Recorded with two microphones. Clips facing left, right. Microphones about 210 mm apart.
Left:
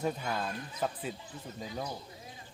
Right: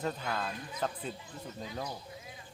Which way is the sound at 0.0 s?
10° left (ahead or behind).